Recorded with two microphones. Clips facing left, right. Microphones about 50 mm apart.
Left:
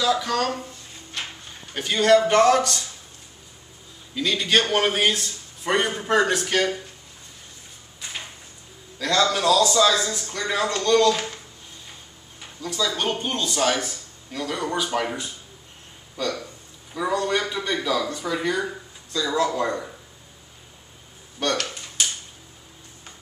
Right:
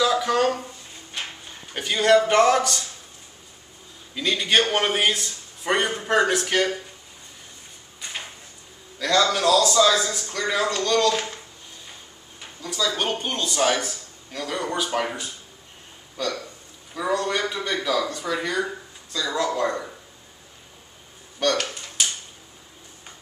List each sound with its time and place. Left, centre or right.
0.0 s speech: centre
1.7 s a man's voice: centre
4.1 s a man's voice: centre
9.0 s a man's voice: centre
12.4 s a sound: centre
13.1 s a man's voice: centre
17.1 s a man's voice: centre
19.4 s speech: centre